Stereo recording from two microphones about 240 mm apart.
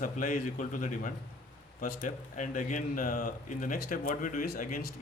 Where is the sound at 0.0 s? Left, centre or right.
Left.